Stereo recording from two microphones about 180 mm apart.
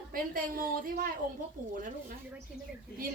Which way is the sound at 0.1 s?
55° right (ahead or behind).